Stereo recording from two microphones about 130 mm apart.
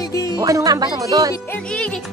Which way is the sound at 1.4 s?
10° left (ahead or behind).